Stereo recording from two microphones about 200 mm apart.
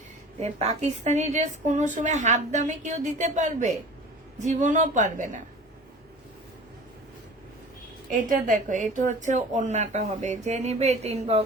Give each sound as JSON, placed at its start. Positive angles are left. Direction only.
{"t": 0.3, "sound": "a woman's voice", "side_deg": -35}
{"t": 8.1, "sound": "a woman's voice", "side_deg": -40}